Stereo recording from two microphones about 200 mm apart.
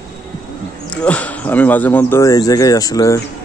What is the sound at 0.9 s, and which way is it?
Speech, 5° left (ahead or behind).